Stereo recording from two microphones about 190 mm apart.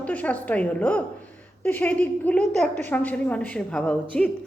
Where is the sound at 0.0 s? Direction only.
10° left (ahead or behind).